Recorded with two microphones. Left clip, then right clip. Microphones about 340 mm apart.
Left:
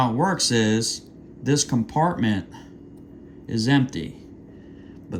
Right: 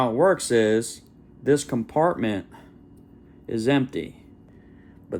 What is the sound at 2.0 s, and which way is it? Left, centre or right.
Speech, left.